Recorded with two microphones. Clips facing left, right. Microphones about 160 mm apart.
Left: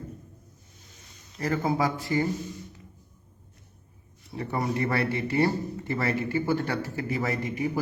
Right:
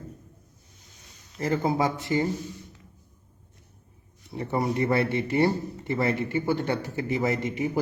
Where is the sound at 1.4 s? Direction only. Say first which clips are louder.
Right 1 dB; 25° right (ahead or behind).